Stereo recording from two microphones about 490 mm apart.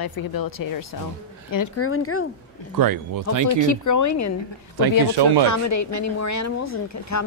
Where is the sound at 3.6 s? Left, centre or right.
Left.